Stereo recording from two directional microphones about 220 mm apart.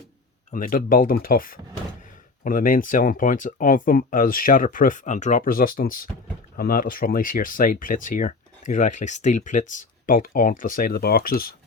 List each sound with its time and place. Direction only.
0.5 s speech: 40° left (ahead or behind)